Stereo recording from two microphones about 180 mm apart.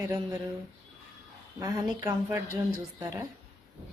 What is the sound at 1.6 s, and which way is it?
Speech, 20° right (ahead or behind).